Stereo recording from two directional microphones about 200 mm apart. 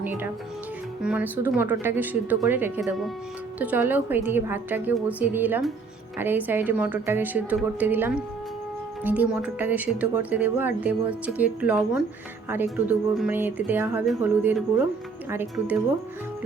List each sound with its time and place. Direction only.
1.0 s a woman's voice: 5° right (ahead or behind)